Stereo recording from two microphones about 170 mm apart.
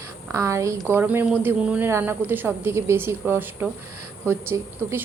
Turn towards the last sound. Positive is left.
turn(degrees=-15)  # may be behind; listen again after turning